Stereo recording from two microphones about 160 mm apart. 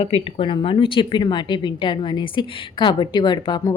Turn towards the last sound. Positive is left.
turn(degrees=25)  # may be behind; listen again after turning